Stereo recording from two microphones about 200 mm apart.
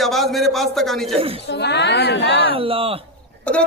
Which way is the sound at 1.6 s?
60° left (ahead or behind).